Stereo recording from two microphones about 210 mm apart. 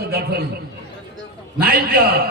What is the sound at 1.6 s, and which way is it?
Music, 45° right (ahead or behind).